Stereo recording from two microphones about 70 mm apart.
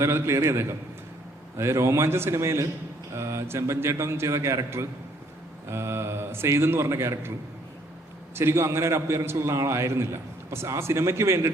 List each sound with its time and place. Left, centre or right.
0.0 s a man's voice: right
8.4 s a man's voice: right